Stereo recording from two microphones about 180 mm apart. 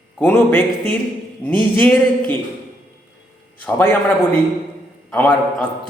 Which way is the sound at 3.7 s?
10° left (ahead or behind).